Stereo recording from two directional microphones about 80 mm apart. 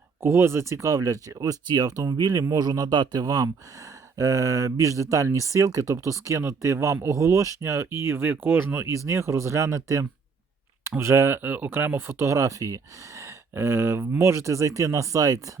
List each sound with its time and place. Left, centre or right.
0.2 s speech: right
11.4 s speech: right